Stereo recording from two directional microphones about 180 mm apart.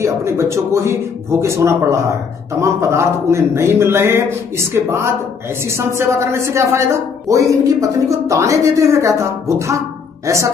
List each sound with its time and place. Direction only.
0.0 s a woman's voice: 15° right (ahead or behind)